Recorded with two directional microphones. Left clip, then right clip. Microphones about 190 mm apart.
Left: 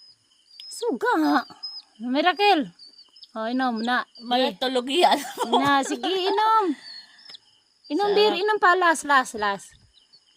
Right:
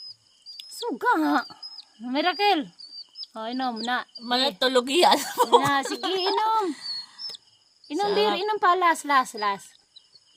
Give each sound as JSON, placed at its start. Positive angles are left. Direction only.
{"t": 0.9, "sound": "a woman's voice", "side_deg": 15}
{"t": 4.7, "sound": "speech", "side_deg": -30}
{"t": 5.6, "sound": "a woman's voice", "side_deg": 25}
{"t": 6.7, "sound": "a sound", "side_deg": -30}
{"t": 7.9, "sound": "a woman's voice", "side_deg": 25}